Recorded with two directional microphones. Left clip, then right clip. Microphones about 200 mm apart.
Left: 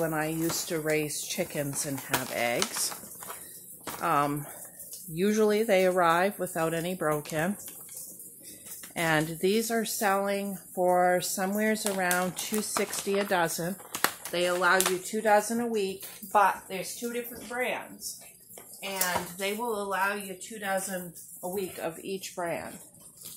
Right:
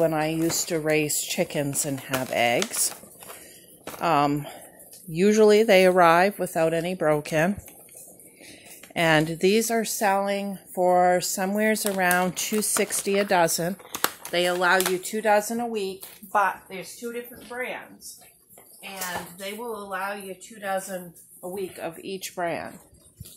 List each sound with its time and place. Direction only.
0.0 s speech: 40° right (ahead or behind)
4.0 s speech: 35° right (ahead or behind)
8.9 s speech: 40° right (ahead or behind)
15.7 s speech: 25° right (ahead or behind)
17.0 s a woman's voice: 5° left (ahead or behind)
19.9 s a woman's voice: 10° left (ahead or behind)
21.7 s speech: 20° right (ahead or behind)
22.0 s speech: 40° right (ahead or behind)